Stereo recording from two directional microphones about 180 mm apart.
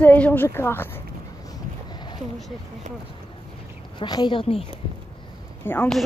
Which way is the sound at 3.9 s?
25° left (ahead or behind).